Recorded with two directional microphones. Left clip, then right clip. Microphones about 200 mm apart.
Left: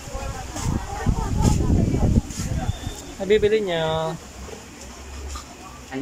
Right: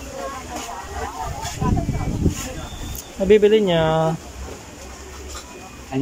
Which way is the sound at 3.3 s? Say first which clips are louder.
Right 5 dB; 10° right (ahead or behind).